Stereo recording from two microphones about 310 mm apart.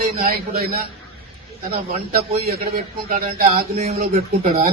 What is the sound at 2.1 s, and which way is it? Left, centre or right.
A man's voice, right.